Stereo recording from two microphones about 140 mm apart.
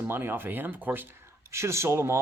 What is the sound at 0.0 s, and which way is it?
A man's voice, 15° right (ahead or behind).